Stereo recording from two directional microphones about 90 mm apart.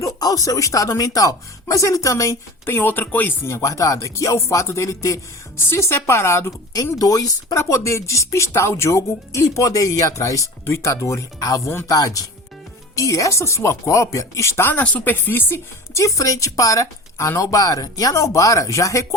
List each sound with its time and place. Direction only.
0.0 s speech: 40° left (ahead or behind); by 3.3 s 20° left (ahead or behind)
3.4 s speech: 35° left (ahead or behind)
7.0 s speech: 40° left (ahead or behind)
11.9 s speech: 40° left (ahead or behind)